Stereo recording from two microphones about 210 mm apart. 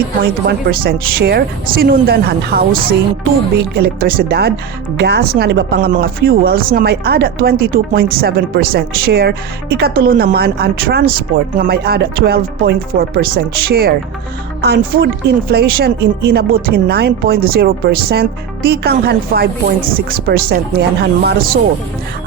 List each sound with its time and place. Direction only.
0.4 s speech: 45° right (ahead or behind)